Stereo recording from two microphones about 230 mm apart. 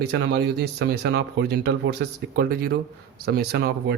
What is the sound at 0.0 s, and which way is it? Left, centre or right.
Speech, right.